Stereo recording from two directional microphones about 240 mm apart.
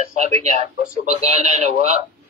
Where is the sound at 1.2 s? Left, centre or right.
Right.